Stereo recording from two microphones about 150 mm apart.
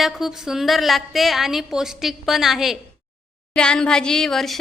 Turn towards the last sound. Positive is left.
turn(degrees=0)  # may be behind; listen again after turning